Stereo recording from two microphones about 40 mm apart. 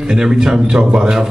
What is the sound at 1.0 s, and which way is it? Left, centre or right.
Speech, centre.